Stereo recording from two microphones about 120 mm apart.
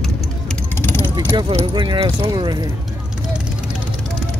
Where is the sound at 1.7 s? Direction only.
45° right (ahead or behind).